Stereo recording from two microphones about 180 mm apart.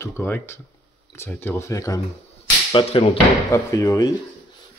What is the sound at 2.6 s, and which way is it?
Whip, 30° left (ahead or behind).